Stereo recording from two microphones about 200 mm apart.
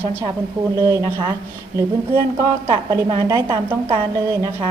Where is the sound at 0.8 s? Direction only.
20° right (ahead or behind).